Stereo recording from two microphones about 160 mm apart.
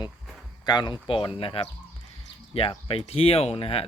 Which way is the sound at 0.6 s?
25° left (ahead or behind).